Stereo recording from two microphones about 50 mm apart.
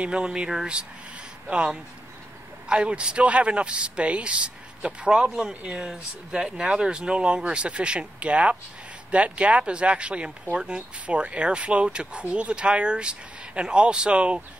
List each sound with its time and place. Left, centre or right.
0.0 s a man's voice: right
0.5 s speech: centre
2.7 s a man's voice: right